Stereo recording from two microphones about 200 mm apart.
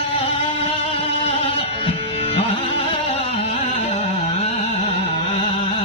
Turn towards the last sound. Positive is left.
turn(degrees=35)  # may be behind; listen again after turning